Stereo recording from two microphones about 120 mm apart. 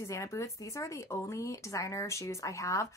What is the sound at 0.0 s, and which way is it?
Speech, 25° left (ahead or behind).